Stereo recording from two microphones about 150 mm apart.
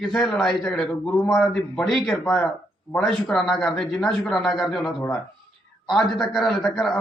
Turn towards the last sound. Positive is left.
turn(degrees=0)  # may be behind; listen again after turning